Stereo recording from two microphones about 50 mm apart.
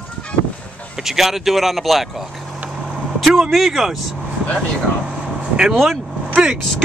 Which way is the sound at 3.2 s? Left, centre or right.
Centre.